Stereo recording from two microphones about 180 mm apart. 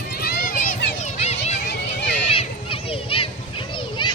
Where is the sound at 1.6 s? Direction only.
70° left (ahead or behind).